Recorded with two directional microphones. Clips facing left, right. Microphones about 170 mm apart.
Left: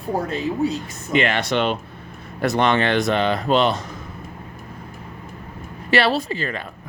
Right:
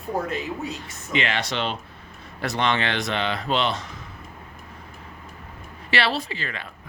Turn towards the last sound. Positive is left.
turn(degrees=45)  # may be behind; listen again after turning